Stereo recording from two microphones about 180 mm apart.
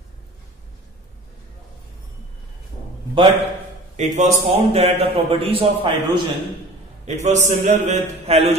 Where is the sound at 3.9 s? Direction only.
40° right (ahead or behind).